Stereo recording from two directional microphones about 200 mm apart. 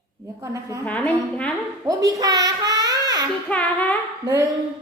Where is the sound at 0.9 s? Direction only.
5° left (ahead or behind).